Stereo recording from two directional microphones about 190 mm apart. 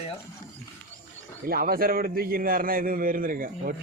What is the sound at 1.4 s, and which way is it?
A man's voice, 50° right (ahead or behind).